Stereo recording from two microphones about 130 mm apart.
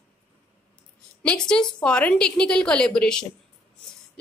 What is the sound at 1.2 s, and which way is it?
A woman's voice, 5° left (ahead or behind).